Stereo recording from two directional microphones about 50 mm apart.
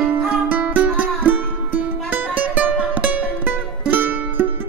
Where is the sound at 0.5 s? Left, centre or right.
Right.